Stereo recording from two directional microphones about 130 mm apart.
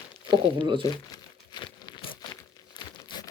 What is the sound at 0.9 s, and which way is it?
Crumpling, 30° left (ahead or behind).